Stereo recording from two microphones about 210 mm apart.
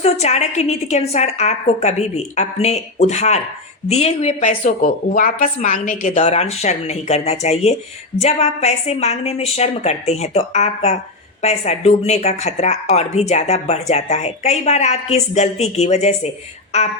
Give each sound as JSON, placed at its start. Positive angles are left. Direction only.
{"t": 0.0, "sound": "speech", "side_deg": 30}